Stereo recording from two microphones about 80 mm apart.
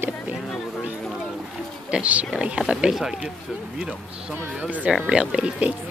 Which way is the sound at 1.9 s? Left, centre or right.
Centre.